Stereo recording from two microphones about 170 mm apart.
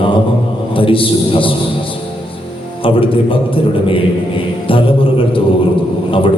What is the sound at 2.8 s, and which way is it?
A man's voice, 30° left (ahead or behind).